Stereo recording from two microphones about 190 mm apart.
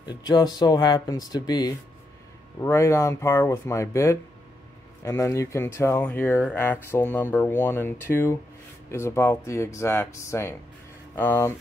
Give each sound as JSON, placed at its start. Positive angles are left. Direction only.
{"t": 0.0, "sound": "speech", "side_deg": 20}